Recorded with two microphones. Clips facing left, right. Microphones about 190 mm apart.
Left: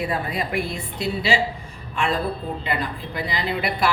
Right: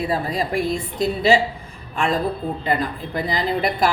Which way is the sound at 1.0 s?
45° right (ahead or behind).